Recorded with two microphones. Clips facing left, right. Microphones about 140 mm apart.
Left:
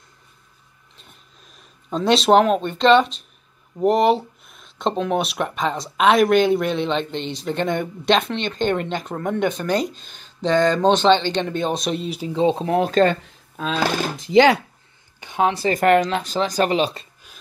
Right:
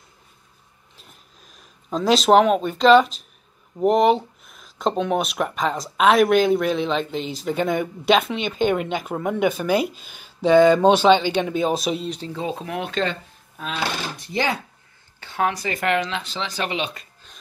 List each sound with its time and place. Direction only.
0.9 s a sound: centre (ahead or behind)
3.7 s speech: centre (ahead or behind)
12.4 s speech: 30° left (ahead or behind); by 13.2 s 45° left (ahead or behind)
14.3 s speech: 90° left
15.1 s speech: 20° left (ahead or behind); by 17.1 s 35° left (ahead or behind)